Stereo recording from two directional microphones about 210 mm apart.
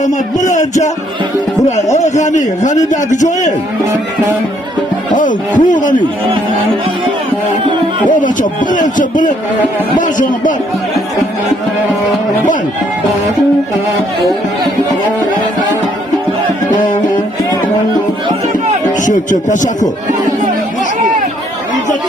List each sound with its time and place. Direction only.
0.0 s a man's voice: 35° left (ahead or behind)
2.0 s a man's voice: 35° left (ahead or behind)
5.1 s a man's voice: 40° left (ahead or behind)
8.0 s a man's voice: 40° left (ahead or behind)
19.0 s a man's voice: 35° left (ahead or behind)